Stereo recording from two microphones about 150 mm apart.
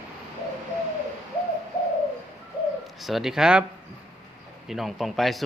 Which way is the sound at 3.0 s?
Centre (ahead or behind).